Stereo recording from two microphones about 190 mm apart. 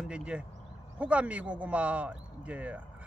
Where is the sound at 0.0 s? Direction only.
5° right (ahead or behind).